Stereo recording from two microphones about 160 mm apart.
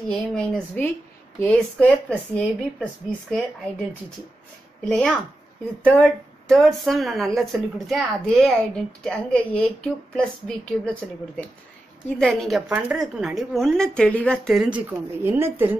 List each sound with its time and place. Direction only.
0.1 s a woman's voice: 5° left (ahead or behind)
4.8 s speech: 5° left (ahead or behind)
12.2 s speech: centre (ahead or behind)